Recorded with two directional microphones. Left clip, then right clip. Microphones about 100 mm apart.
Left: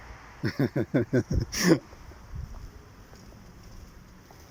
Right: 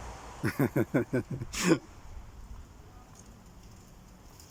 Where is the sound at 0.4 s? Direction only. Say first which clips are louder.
Left 1 dB; 5° left (ahead or behind).